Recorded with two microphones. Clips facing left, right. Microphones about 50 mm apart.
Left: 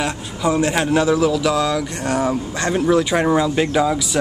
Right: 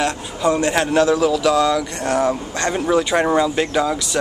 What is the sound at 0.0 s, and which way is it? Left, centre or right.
A man's voice, centre.